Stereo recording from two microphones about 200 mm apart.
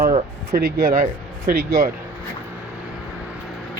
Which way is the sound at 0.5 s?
45° right (ahead or behind).